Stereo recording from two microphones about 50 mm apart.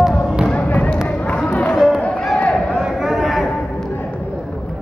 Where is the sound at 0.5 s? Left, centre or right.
Left.